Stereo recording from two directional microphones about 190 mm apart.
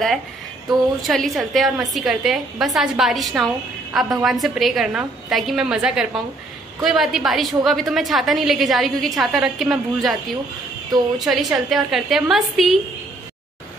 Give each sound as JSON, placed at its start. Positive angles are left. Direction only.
{"t": 0.7, "sound": "a woman's voice", "side_deg": 0}
{"t": 11.1, "sound": "a woman's voice", "side_deg": 0}